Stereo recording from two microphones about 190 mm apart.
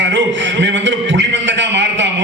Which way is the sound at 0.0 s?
70° right (ahead or behind).